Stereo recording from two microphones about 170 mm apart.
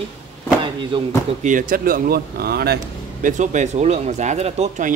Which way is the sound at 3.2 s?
45° right (ahead or behind).